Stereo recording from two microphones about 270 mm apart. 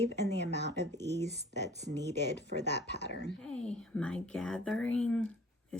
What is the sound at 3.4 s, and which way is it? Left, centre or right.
Speech, centre.